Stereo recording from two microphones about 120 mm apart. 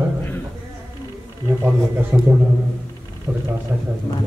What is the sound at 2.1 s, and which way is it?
A man's voice, 25° right (ahead or behind).